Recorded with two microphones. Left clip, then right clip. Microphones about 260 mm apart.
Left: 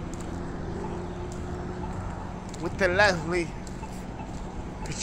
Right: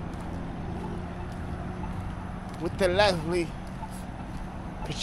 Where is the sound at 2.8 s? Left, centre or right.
Centre.